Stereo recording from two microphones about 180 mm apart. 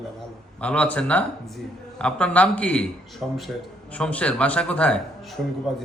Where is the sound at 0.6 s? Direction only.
5° left (ahead or behind).